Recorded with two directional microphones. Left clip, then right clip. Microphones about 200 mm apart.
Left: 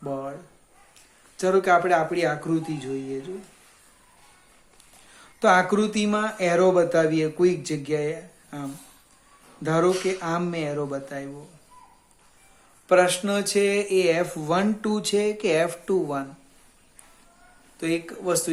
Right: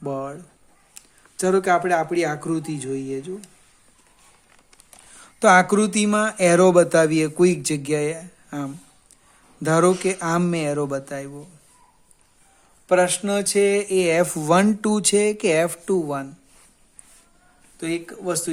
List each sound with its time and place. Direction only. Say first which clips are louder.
0.0 s a sound: right 3 dB; 45° right (ahead or behind)
1.4 s speech: right 1 dB; 45° right (ahead or behind)
5.1 s speech: right 4 dB; 45° right (ahead or behind)
12.9 s speech: right 1 dB; 40° right (ahead or behind)
17.7 s speech: even; 30° right (ahead or behind)